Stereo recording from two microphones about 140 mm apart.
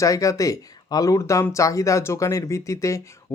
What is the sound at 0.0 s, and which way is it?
Speech, 25° left (ahead or behind).